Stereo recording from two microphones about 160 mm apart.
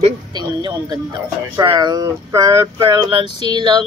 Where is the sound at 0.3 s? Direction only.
25° right (ahead or behind).